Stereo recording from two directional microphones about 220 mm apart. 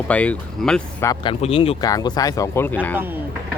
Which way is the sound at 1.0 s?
20° left (ahead or behind).